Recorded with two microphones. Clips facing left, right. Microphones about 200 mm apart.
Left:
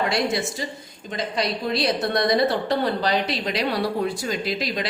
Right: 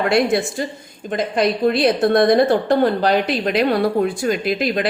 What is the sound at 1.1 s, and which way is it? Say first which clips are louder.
A woman's voice: right 7 dB; 55° right (ahead or behind).